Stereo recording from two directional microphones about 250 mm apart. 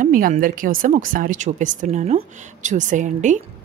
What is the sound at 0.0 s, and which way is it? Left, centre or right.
Speech, right.